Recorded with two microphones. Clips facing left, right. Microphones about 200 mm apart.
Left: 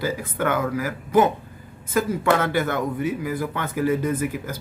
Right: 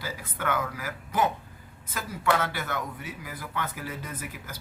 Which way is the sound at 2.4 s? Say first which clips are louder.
Left 10 dB; 50° left (ahead or behind).